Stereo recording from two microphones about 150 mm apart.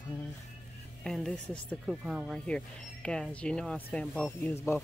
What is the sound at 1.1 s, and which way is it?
Speech, 5° left (ahead or behind).